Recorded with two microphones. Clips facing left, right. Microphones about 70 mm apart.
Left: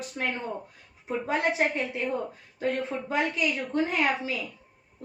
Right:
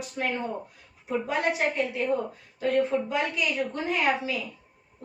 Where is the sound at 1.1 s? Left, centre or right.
Left.